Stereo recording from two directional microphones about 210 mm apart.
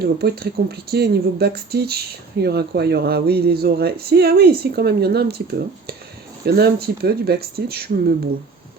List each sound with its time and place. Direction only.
0.0 s speech: 50° right (ahead or behind)